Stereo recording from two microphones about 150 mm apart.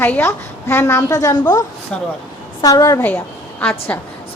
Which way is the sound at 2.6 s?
25° left (ahead or behind).